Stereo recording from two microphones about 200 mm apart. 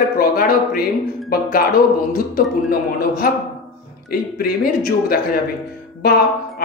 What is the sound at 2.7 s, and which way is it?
Speech, 45° left (ahead or behind).